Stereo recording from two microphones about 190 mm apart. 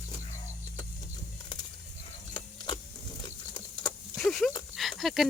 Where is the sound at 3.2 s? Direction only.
25° left (ahead or behind).